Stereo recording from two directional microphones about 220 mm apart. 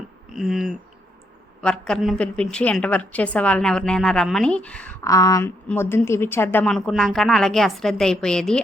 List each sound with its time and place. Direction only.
0.3 s a woman's voice: centre (ahead or behind)